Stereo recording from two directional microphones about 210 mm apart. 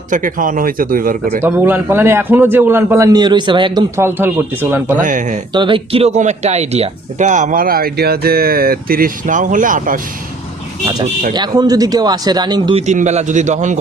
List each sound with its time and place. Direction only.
0.1 s speech: 40° right (ahead or behind)
1.5 s a man's voice: 10° right (ahead or behind)
5.0 s speech: 35° right (ahead or behind)
5.5 s speech: 25° right (ahead or behind); by 10.0 s 40° right (ahead or behind)
11.3 s a man's voice: 20° right (ahead or behind); by 13.7 s 35° right (ahead or behind)